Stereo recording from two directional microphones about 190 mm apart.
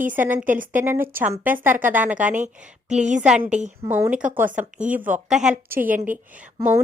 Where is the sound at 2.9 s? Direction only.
40° right (ahead or behind).